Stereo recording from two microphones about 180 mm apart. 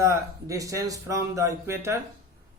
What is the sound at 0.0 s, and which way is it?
Speech, 15° right (ahead or behind).